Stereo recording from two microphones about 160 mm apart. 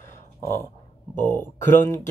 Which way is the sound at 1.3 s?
15° left (ahead or behind).